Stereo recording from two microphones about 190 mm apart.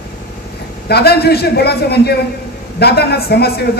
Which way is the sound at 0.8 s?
60° left (ahead or behind).